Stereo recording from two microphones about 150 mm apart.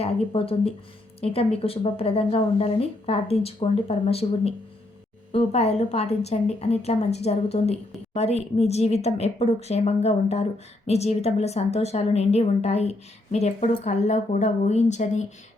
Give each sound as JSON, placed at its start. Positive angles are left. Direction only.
{"t": 0.0, "sound": "a woman's voice", "side_deg": 40}